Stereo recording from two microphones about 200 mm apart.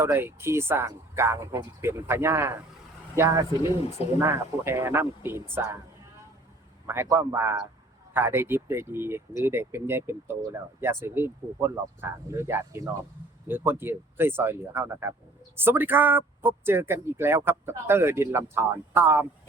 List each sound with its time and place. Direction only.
0.0 s speech: 10° right (ahead or behind)
6.8 s speech: 10° right (ahead or behind)